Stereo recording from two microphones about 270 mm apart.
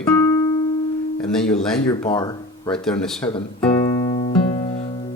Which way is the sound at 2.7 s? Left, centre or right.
Centre.